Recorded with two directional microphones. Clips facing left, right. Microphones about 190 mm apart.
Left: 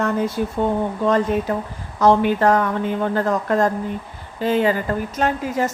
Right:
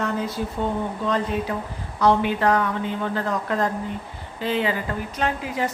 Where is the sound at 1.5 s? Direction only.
45° left (ahead or behind).